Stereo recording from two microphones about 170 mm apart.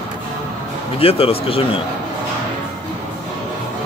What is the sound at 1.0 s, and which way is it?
Speech, 35° left (ahead or behind).